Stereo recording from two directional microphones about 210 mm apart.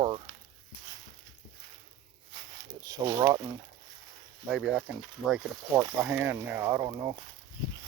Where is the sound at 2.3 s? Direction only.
15° right (ahead or behind).